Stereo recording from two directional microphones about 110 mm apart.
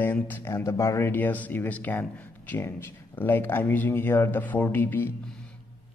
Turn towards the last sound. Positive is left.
turn(degrees=15)  # may be behind; listen again after turning